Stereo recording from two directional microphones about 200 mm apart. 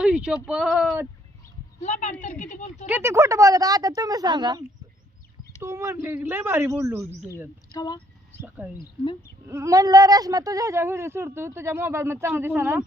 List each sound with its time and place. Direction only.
0.0 s a sound: 5° right (ahead or behind)
0.4 s speech: 5° right (ahead or behind)
1.8 s a woman's voice: 35° left (ahead or behind)
2.8 s speech: 10° right (ahead or behind)
5.6 s speech: 15° right (ahead or behind)
7.7 s speech: 20° left (ahead or behind)
8.4 s speech: 10° right (ahead or behind)